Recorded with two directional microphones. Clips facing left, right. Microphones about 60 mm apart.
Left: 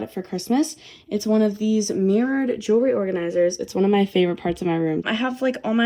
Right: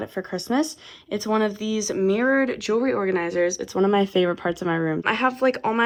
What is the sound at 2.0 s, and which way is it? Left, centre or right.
Speech, right.